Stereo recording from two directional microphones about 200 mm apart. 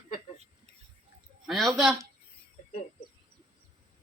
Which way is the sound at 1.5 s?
Centre (ahead or behind).